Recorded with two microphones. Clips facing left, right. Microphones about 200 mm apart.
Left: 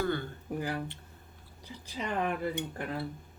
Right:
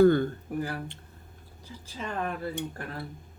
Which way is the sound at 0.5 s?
20° left (ahead or behind).